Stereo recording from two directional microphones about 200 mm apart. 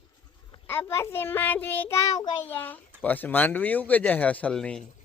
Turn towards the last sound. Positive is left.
turn(degrees=5)  # may be behind; listen again after turning